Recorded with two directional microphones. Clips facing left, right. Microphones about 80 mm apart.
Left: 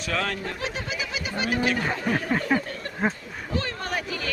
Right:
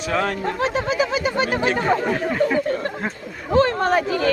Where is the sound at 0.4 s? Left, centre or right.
Right.